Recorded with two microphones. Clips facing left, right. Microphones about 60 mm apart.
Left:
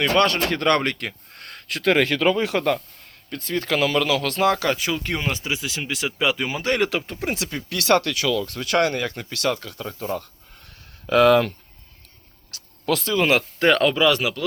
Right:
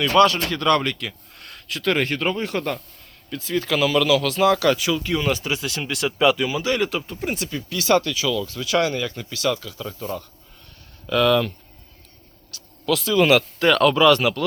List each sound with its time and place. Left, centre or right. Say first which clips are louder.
0.4 s speech: even; left
3.2 s speech: right 1 dB; left
4.5 s speech: right 4 dB; left
5.2 s speech: right 3 dB; centre
6.3 s speech: right 3 dB; left
6.6 s speech: left 1 dB; left
9.8 s speech: left 4 dB; left
11.0 s speech: left 3 dB; left
12.8 s speech: right 1 dB; left
13.1 s speech: right 4 dB; left
13.8 s speech: right 3 dB; centre